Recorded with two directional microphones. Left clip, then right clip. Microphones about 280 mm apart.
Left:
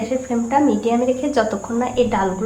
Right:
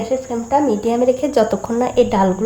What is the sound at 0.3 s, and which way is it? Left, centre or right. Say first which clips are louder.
Speech: left 1 dB; right.